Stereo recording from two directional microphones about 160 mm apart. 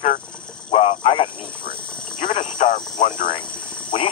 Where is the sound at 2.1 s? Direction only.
30° left (ahead or behind).